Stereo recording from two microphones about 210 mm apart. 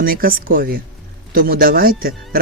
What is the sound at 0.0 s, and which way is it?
Speech, 45° right (ahead or behind).